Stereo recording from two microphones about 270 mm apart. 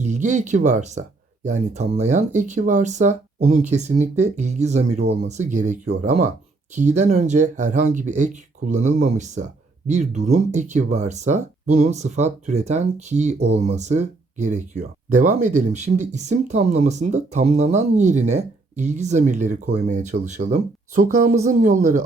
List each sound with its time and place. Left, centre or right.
0.0 s speech: right